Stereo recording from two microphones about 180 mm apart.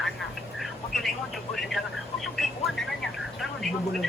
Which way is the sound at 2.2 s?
Centre (ahead or behind).